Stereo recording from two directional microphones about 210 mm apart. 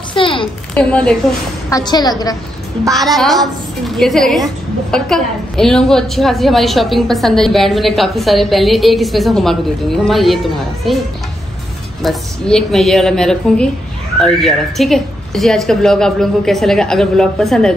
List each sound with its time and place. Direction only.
0.1 s a sound: 25° left (ahead or behind)
0.7 s a woman's voice: 5° left (ahead or behind)
1.7 s a woman's voice: 20° left (ahead or behind)
2.9 s a woman's voice: centre (ahead or behind)
12.0 s a woman's voice: centre (ahead or behind)